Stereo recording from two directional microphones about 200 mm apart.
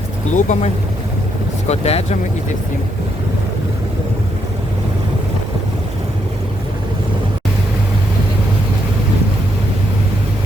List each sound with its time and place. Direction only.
0.3 s speech: 35° left (ahead or behind)